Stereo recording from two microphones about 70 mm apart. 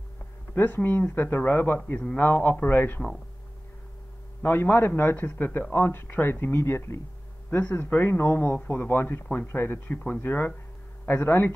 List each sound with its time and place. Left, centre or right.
0.6 s speech: left
4.4 s speech: left